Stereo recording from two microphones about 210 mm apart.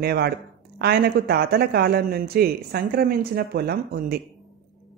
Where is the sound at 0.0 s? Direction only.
50° right (ahead or behind).